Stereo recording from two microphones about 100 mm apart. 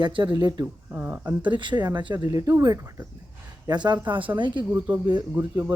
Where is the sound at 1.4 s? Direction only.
50° right (ahead or behind); by 3.1 s 30° right (ahead or behind).